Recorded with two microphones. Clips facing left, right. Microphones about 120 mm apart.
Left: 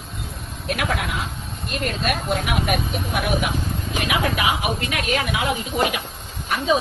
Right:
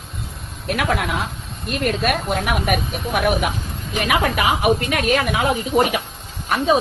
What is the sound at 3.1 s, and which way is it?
Speech, 50° right (ahead or behind).